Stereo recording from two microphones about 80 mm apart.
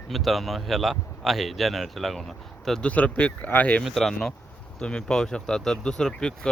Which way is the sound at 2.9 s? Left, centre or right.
Centre.